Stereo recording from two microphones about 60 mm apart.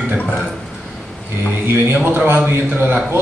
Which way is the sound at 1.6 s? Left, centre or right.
Right.